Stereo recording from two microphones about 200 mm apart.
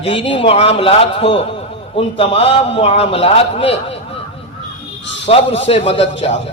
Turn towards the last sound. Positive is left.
turn(degrees=30)  # may be behind; listen again after turning